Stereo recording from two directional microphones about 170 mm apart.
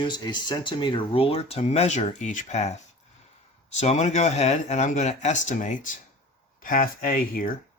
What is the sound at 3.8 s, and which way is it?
Speech, 40° left (ahead or behind).